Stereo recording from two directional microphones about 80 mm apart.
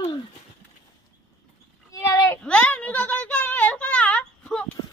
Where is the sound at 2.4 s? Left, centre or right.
Centre.